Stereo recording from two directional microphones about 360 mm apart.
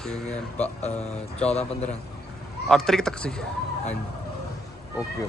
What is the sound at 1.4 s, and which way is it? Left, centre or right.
Speech, centre.